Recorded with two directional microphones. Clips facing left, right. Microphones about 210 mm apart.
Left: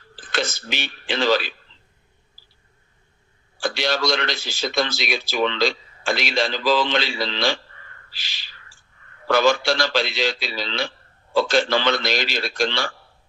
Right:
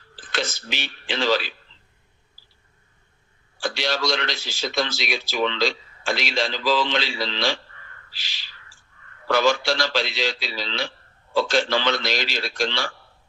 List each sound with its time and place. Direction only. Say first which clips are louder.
0.3 s speech: left 2 dB; 50° left (ahead or behind)
3.6 s a man's voice: left 2 dB; 50° left (ahead or behind)